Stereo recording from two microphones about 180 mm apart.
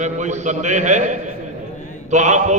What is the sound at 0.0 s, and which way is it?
A man's voice, 40° right (ahead or behind).